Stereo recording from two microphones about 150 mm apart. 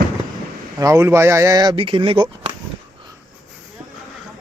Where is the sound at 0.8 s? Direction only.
20° right (ahead or behind); by 2.5 s 35° right (ahead or behind).